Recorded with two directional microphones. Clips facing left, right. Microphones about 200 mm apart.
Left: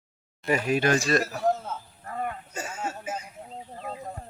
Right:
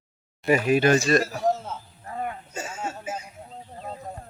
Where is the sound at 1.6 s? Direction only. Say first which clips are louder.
Even; 10° right (ahead or behind).